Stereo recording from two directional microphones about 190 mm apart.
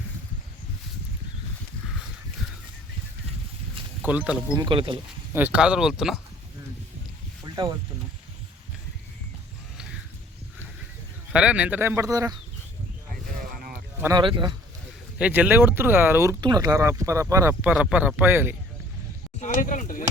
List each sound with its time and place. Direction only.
4.0 s speech: 5° right (ahead or behind)
4.5 s speech: 25° right (ahead or behind)
5.3 s speech: 10° right (ahead or behind)
7.4 s a sound: 20° right (ahead or behind)
11.3 s speech: 5° right (ahead or behind)
14.0 s speech: 20° right (ahead or behind)
15.2 s speech: 10° right (ahead or behind)
17.6 s speech: 5° right (ahead or behind)
19.4 s a sound: 45° left (ahead or behind)